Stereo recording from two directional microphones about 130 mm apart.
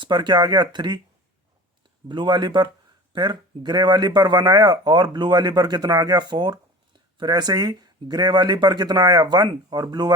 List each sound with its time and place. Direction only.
0.0 s speech: 35° right (ahead or behind)
2.0 s speech: 35° right (ahead or behind)